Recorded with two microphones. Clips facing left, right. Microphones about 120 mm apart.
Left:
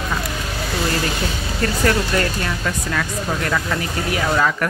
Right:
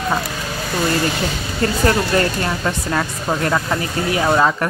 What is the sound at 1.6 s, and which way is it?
Speech, 30° right (ahead or behind).